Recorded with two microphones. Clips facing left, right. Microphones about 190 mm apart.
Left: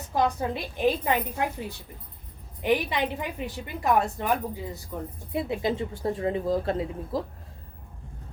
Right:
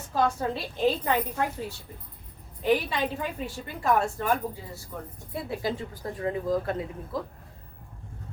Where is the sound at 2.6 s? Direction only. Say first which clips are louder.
Even; 15° left (ahead or behind).